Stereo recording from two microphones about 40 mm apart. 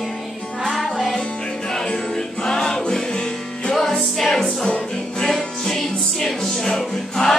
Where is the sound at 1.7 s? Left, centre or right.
Centre.